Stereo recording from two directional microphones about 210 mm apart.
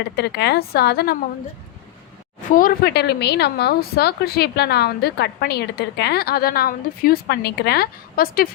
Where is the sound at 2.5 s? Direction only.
45° left (ahead or behind).